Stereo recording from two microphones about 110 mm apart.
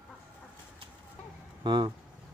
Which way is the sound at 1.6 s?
40° right (ahead or behind).